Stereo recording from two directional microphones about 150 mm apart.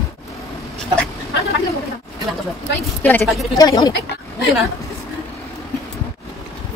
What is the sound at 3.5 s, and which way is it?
Speech, 25° left (ahead or behind).